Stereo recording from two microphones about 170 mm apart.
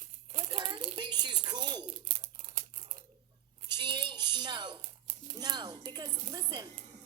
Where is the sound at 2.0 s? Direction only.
45° right (ahead or behind).